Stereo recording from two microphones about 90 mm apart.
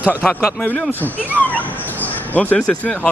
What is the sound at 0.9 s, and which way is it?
Speech, 20° left (ahead or behind).